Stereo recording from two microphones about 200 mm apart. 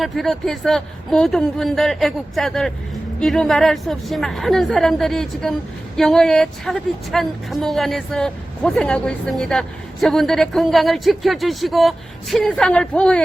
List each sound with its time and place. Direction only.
0.0 s a woman's voice: centre (ahead or behind)